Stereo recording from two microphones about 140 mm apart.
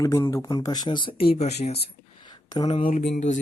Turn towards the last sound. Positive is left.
turn(degrees=60)  # may be behind; listen again after turning